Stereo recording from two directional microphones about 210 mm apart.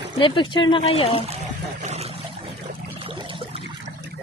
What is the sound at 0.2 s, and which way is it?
Speech, 25° left (ahead or behind).